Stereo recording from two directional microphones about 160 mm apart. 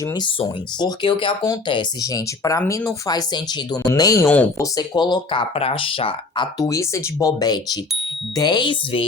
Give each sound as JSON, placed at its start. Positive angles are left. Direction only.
{"t": 0.0, "sound": "speech", "side_deg": 25}
{"t": 4.3, "sound": "speech", "side_deg": 10}
{"t": 4.6, "sound": "speech", "side_deg": 25}